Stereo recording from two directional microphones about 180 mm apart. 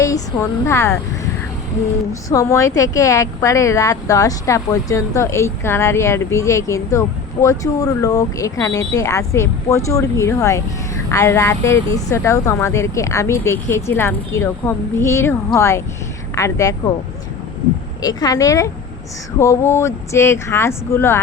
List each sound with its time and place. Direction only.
0.0 s speech: 15° left (ahead or behind)
2.3 s a woman's voice: 15° left (ahead or behind)
18.0 s a woman's voice: 20° left (ahead or behind)